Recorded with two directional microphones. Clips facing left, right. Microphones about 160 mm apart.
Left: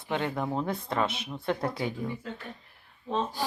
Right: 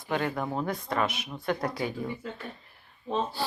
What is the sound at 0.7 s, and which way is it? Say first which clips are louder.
Speech: even; 25° left (ahead or behind).